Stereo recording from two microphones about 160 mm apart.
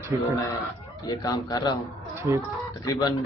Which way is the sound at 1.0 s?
25° left (ahead or behind).